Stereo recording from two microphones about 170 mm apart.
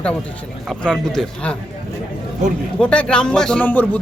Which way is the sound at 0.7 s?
5° left (ahead or behind).